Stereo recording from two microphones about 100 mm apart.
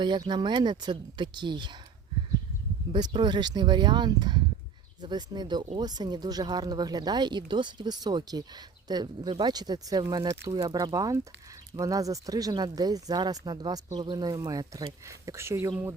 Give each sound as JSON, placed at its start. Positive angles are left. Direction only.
{"t": 0.0, "sound": "speech", "side_deg": -50}
{"t": 2.9, "sound": "speech", "side_deg": -50}
{"t": 10.9, "sound": "speech", "side_deg": -35}
{"t": 15.3, "sound": "speech", "side_deg": -25}